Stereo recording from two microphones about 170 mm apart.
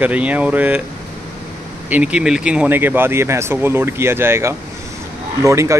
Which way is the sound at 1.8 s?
10° right (ahead or behind).